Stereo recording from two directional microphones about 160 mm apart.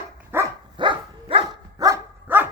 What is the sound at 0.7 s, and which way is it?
Dog, 30° right (ahead or behind).